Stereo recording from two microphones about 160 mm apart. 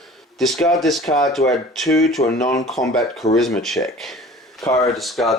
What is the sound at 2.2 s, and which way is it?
Speech, 40° left (ahead or behind).